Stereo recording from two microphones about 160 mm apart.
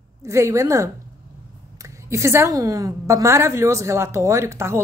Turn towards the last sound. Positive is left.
turn(degrees=-15)  # may be behind; listen again after turning